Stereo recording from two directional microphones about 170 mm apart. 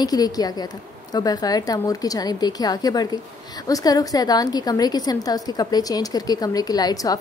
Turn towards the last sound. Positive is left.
turn(degrees=20)  # may be behind; listen again after turning